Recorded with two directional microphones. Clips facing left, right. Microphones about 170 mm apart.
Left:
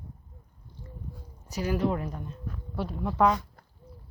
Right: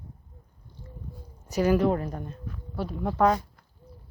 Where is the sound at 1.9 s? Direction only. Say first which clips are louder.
Right 3 dB; 40° right (ahead or behind).